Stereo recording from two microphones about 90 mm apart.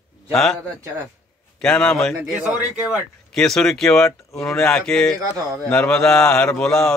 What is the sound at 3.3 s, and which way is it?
A man's voice, 5° left (ahead or behind).